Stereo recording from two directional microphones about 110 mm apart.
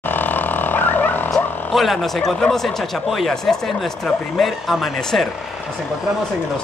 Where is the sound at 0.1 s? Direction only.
15° left (ahead or behind).